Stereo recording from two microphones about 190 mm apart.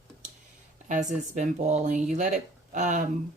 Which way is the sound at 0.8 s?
40° right (ahead or behind).